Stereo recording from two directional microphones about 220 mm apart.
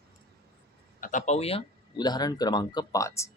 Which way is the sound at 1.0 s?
35° left (ahead or behind).